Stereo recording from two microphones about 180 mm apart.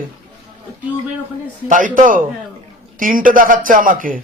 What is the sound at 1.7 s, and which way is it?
A man's voice, 45° right (ahead or behind).